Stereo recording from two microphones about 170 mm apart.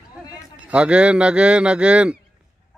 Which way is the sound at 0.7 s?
5° right (ahead or behind).